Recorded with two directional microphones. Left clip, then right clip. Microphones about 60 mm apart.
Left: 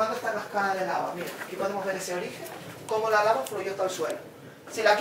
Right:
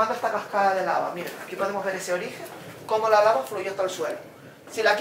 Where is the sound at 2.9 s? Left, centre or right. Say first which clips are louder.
Right 4 dB; right.